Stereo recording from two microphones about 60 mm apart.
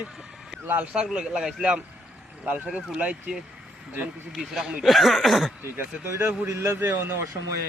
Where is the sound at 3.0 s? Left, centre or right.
Centre.